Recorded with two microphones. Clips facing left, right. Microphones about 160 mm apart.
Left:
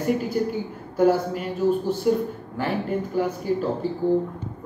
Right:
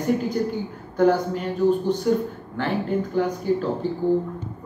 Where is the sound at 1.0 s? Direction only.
5° left (ahead or behind).